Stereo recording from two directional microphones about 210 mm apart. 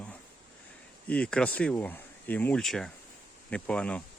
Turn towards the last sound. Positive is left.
turn(degrees=5)  # may be behind; listen again after turning